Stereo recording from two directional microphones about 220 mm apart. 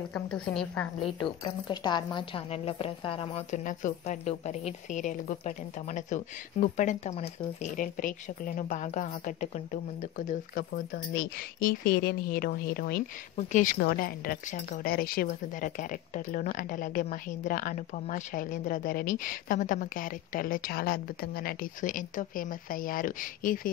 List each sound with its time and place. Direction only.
0.1 s a woman's voice: 5° left (ahead or behind)
1.0 s a woman's voice: 20° left (ahead or behind); by 13.0 s 45° left (ahead or behind)
13.4 s a woman's voice: 35° left (ahead or behind)